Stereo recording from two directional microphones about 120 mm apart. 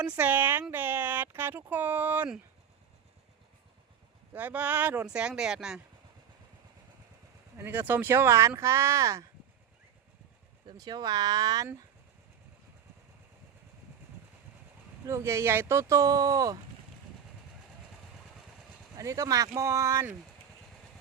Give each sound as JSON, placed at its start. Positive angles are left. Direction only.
{"t": 0.0, "sound": "speech", "side_deg": -15}
{"t": 4.4, "sound": "speech", "side_deg": -15}
{"t": 7.5, "sound": "speech", "side_deg": -15}
{"t": 10.7, "sound": "speech", "side_deg": -35}
{"t": 15.0, "sound": "speech", "side_deg": -25}
{"t": 18.9, "sound": "speech", "side_deg": -25}